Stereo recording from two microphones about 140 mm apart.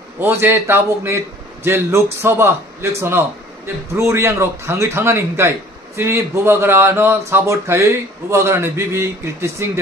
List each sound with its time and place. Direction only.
0.2 s a man's voice: 15° right (ahead or behind)